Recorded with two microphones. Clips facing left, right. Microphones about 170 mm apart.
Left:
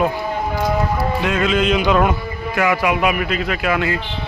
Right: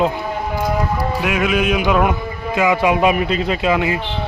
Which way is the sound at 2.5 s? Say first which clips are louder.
Right 2 dB; 20° right (ahead or behind).